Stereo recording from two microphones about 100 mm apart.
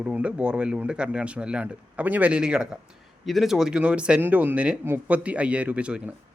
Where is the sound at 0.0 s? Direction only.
10° right (ahead or behind).